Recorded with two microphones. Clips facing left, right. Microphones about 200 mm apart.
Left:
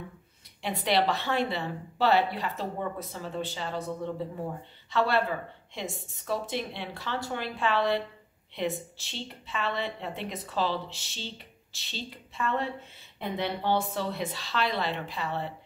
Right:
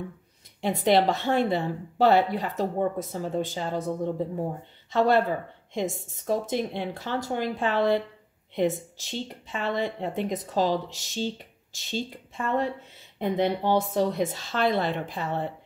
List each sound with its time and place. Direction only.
0.6 s a woman's voice: 45° right (ahead or behind)
13.7 s a woman's voice: 45° right (ahead or behind)